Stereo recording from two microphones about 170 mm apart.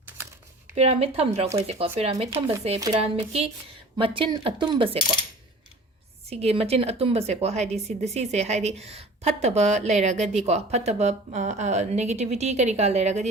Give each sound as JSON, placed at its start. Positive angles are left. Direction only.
{"t": 0.8, "sound": "a woman's voice", "side_deg": -35}
{"t": 6.3, "sound": "a woman's voice", "side_deg": -35}